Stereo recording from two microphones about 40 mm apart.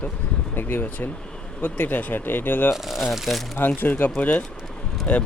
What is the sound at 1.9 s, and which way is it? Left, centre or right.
Speech, left.